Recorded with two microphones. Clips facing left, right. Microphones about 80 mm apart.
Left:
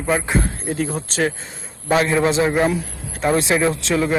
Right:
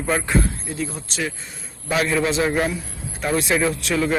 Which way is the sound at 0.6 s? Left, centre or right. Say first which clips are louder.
Left 5 dB; left.